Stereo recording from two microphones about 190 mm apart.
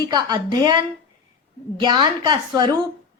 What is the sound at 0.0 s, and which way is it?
A woman's voice, 20° right (ahead or behind).